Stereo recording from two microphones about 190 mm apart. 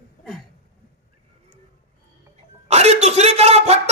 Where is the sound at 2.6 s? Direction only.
35° right (ahead or behind).